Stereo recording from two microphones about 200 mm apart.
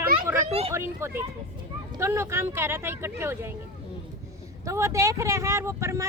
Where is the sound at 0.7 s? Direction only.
10° right (ahead or behind).